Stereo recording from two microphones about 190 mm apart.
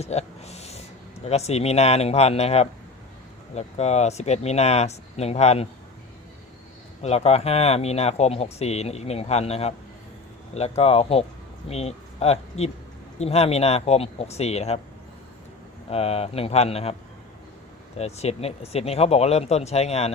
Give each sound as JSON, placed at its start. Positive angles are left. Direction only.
{"t": 0.0, "sound": "speech", "side_deg": 35}
{"t": 7.0, "sound": "speech", "side_deg": 35}
{"t": 15.9, "sound": "speech", "side_deg": 30}
{"t": 17.9, "sound": "speech", "side_deg": 35}